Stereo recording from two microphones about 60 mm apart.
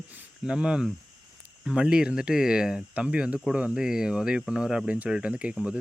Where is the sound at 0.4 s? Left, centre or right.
Centre.